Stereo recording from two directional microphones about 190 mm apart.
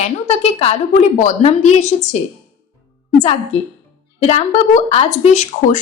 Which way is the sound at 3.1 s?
35° left (ahead or behind).